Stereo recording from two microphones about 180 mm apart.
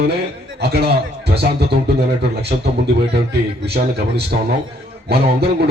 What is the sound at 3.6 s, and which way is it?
Speech, 65° right (ahead or behind).